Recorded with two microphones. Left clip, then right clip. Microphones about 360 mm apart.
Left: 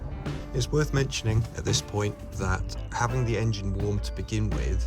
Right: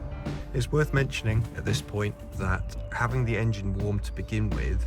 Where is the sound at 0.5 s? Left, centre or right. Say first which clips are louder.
Right 1 dB; centre.